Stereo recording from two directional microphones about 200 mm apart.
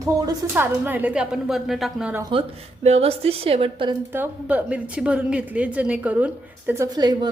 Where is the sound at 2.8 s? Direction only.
30° right (ahead or behind).